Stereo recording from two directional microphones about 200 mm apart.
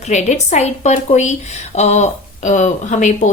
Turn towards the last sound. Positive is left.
turn(degrees=40)  # may be behind; listen again after turning